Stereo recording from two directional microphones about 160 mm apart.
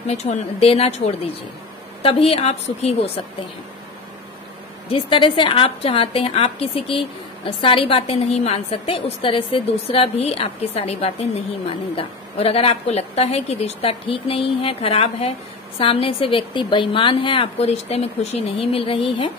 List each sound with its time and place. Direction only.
0.1 s a woman's voice: 45° left (ahead or behind)
4.8 s a woman's voice: 35° left (ahead or behind)